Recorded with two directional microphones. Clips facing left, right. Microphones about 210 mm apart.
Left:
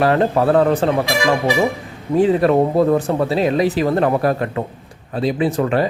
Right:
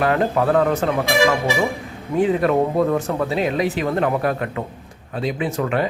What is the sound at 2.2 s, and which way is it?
Speech, 35° left (ahead or behind).